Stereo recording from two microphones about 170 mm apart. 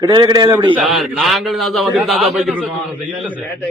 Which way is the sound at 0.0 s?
25° right (ahead or behind).